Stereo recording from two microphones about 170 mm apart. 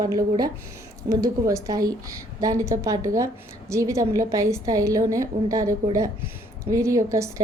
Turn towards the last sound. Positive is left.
turn(degrees=-20)  # may be behind; listen again after turning